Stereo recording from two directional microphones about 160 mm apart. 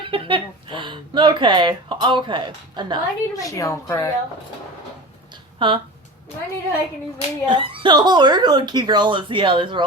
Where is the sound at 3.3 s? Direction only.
20° left (ahead or behind).